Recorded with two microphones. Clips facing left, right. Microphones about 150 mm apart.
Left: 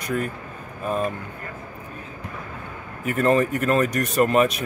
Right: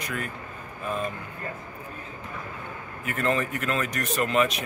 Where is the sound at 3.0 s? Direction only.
45° left (ahead or behind).